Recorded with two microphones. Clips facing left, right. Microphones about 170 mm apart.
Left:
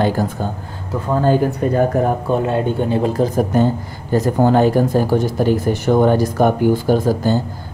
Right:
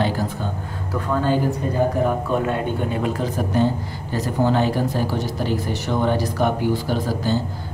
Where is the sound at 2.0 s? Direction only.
35° left (ahead or behind).